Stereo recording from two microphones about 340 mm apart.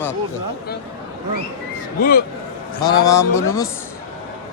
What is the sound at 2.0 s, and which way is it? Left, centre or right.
Speech, left.